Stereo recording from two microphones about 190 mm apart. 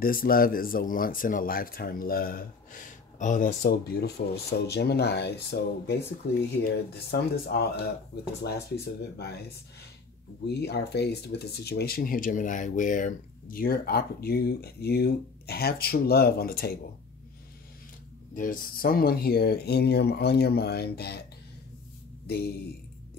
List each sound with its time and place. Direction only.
0.0 s speech: 50° left (ahead or behind)
3.6 s speech: 55° left (ahead or behind)
10.5 s speech: 60° left (ahead or behind)
18.3 s speech: 45° left (ahead or behind)
22.2 s a sound: 60° left (ahead or behind)